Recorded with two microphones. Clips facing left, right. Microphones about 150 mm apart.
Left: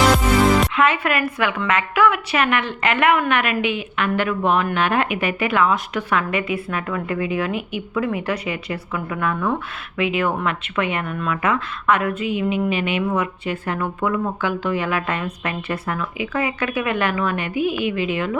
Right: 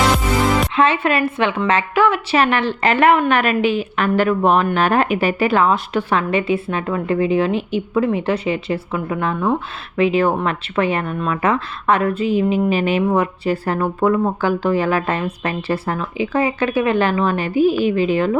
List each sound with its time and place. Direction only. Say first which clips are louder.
0.8 s a woman's voice: right 3 dB; 30° right (ahead or behind)